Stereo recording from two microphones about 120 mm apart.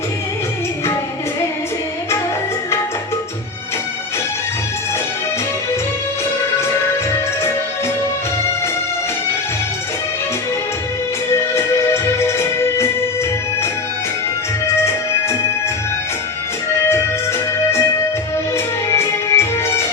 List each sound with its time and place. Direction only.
12.2 s music: 20° left (ahead or behind)
18.5 s music: 20° left (ahead or behind)